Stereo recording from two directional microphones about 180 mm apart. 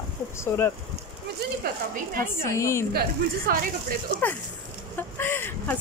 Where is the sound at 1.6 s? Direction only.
60° right (ahead or behind).